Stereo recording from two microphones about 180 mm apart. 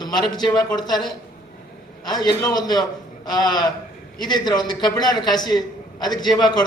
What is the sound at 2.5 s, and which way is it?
A man's voice, 20° left (ahead or behind).